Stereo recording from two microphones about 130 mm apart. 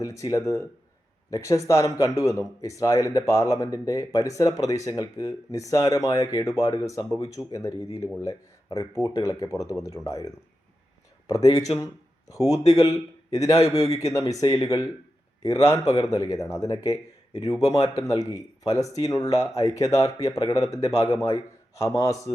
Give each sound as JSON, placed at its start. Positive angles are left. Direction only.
{"t": 0.0, "sound": "a man's voice", "side_deg": 25}